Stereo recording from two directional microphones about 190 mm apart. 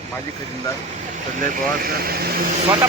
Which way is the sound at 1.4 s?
50° right (ahead or behind).